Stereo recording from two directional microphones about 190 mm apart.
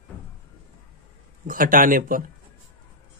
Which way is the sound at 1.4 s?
45° right (ahead or behind).